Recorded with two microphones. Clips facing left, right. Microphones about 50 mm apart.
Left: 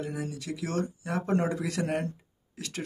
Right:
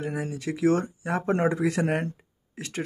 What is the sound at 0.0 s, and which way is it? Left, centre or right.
A man's voice, right.